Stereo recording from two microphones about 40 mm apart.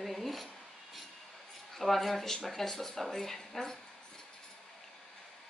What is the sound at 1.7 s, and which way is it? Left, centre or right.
Speech, centre.